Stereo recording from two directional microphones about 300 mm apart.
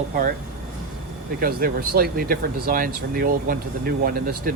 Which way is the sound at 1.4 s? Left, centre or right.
Right.